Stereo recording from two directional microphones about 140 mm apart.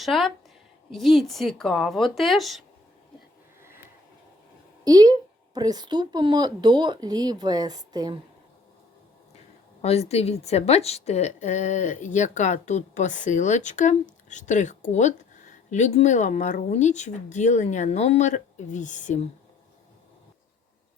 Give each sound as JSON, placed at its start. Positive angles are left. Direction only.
{"t": 0.0, "sound": "speech", "side_deg": 0}
{"t": 4.9, "sound": "speech", "side_deg": -25}
{"t": 9.8, "sound": "a woman's voice", "side_deg": 50}